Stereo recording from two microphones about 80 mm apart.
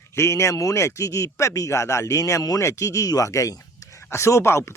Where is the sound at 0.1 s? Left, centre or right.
Left.